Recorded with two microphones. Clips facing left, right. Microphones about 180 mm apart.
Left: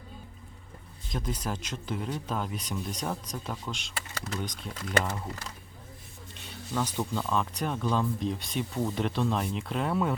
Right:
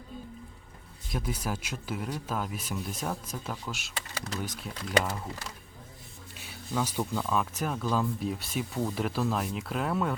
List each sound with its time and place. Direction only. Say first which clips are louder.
1.1 s speech: even; 5° right (ahead or behind)
6.3 s speech: even; 5° right (ahead or behind)